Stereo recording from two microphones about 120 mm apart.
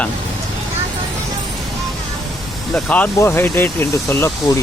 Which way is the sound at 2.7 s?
10° left (ahead or behind).